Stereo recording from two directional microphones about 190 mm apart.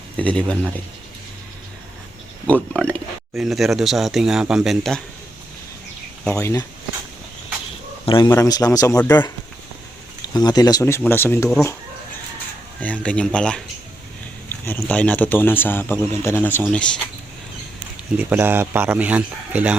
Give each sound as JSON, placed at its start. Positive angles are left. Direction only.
{"t": 0.2, "sound": "speech", "side_deg": 5}
{"t": 2.7, "sound": "speech", "side_deg": 5}
{"t": 6.3, "sound": "speech", "side_deg": 15}
{"t": 8.0, "sound": "a man's voice", "side_deg": 25}
{"t": 10.3, "sound": "speech", "side_deg": 20}
{"t": 12.8, "sound": "speech", "side_deg": 5}
{"t": 18.2, "sound": "speech", "side_deg": -10}